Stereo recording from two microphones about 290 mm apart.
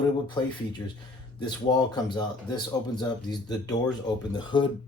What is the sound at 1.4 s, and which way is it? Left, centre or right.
Speech, centre.